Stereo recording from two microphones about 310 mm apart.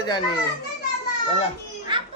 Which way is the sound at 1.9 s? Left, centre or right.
Centre.